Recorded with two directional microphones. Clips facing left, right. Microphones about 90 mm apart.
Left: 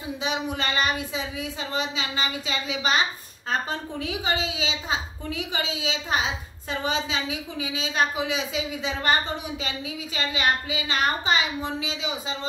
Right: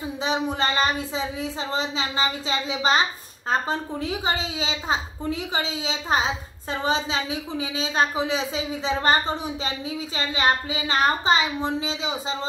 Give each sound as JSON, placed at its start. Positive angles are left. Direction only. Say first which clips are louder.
{"t": 0.2, "sound": "speech", "louder": "right 4 dB", "side_deg": -35}